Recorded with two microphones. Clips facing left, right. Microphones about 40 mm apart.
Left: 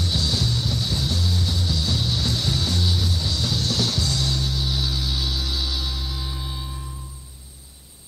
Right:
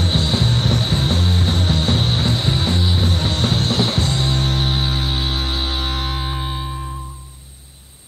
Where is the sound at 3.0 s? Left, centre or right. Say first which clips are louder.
Right 6 dB; right.